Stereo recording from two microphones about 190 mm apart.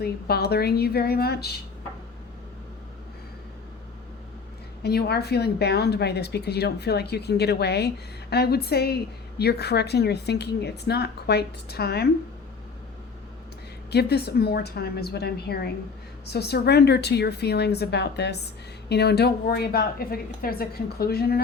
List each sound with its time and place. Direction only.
0.0 s a woman's voice: 55° left (ahead or behind)
4.8 s a woman's voice: 55° left (ahead or behind)
13.9 s a woman's voice: 60° left (ahead or behind)